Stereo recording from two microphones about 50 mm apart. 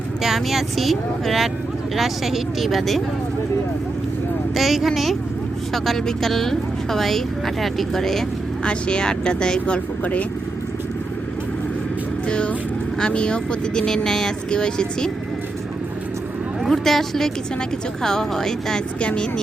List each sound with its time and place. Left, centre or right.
0.2 s speech: centre
4.5 s speech: centre
8.6 s speech: centre
12.3 s speech: left
16.6 s speech: centre
18.9 s speech: left